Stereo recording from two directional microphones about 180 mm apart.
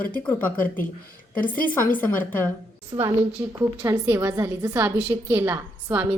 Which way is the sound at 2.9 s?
20° right (ahead or behind).